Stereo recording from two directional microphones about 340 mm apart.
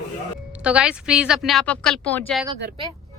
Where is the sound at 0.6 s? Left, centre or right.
Centre.